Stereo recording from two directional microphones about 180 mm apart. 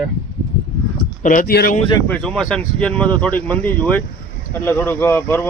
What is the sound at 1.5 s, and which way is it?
Speech, 60° left (ahead or behind).